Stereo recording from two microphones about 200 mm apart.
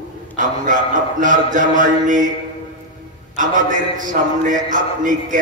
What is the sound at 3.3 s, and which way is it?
A man's voice, 40° right (ahead or behind).